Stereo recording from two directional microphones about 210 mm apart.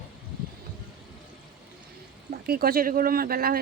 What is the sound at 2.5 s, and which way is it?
Speech, 45° right (ahead or behind).